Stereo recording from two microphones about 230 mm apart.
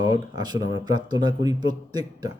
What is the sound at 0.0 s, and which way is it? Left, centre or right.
A man's voice, centre.